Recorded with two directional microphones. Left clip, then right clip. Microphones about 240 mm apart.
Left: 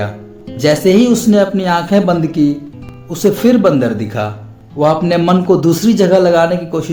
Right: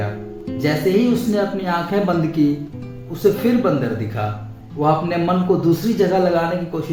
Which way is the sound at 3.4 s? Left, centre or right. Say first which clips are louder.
Left 8 dB; left.